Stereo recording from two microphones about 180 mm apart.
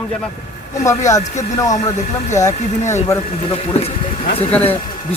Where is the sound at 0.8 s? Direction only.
15° left (ahead or behind).